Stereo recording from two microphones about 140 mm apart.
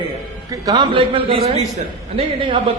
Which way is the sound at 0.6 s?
30° right (ahead or behind).